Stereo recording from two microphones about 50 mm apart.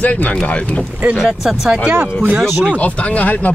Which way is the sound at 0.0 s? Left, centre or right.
Left.